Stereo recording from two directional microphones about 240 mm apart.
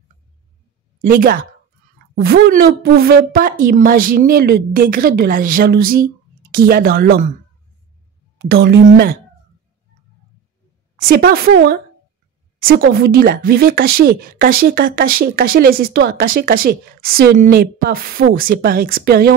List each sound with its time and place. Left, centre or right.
1.0 s speech: right
8.5 s speech: right
11.0 s speech: right